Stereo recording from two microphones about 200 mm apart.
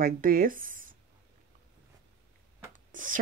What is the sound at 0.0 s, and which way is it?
Speech, 45° right (ahead or behind).